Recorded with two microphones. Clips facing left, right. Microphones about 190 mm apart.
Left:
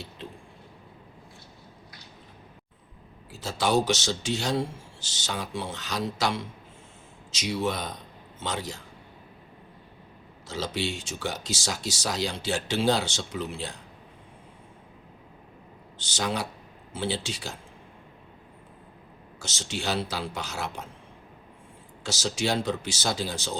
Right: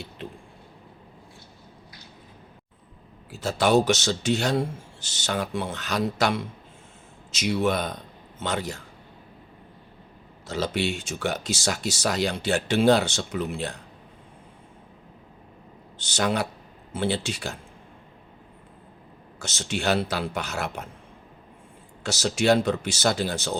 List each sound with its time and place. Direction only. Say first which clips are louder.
3.4 s a man's voice: right 4 dB; 60° right (ahead or behind)
10.4 s speech: right 4 dB; 60° right (ahead or behind)
16.0 s speech: right 5 dB; 60° right (ahead or behind)
19.4 s speech: right 4 dB; 60° right (ahead or behind)
22.0 s speech: right 6 dB; 60° right (ahead or behind)